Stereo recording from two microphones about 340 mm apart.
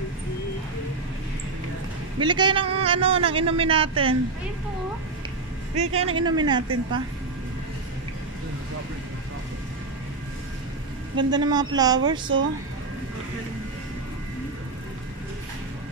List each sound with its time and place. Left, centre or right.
2.1 s a man's voice: centre
6.0 s a man's voice: centre
11.1 s a man's voice: centre